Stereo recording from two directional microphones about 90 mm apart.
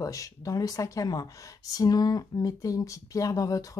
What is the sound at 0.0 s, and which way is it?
Speech, 40° left (ahead or behind).